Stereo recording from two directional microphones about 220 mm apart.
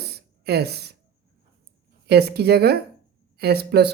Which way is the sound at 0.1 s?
45° right (ahead or behind).